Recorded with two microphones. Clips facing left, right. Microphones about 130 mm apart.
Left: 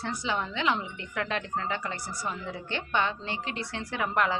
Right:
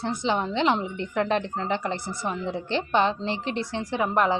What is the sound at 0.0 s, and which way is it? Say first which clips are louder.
Speech: right 6 dB; 25° right (ahead or behind).